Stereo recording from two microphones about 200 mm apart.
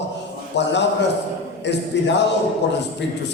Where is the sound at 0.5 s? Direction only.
60° left (ahead or behind).